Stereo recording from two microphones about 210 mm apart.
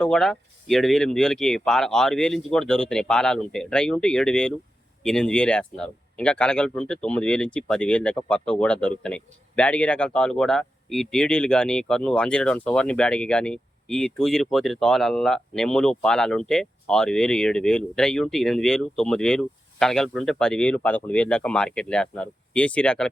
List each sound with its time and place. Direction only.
0.0 s speech: 5° left (ahead or behind)